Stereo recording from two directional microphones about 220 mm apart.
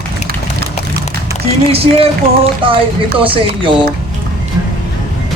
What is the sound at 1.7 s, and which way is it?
Speech, 25° right (ahead or behind).